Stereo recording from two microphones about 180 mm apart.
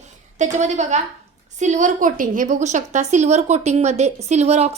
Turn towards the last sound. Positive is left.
turn(degrees=-35)  # may be behind; listen again after turning